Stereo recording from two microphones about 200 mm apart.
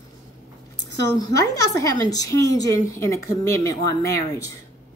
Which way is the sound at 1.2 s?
15° left (ahead or behind).